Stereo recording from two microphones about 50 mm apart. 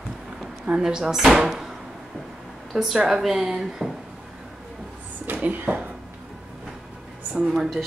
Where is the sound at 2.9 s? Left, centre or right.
Centre.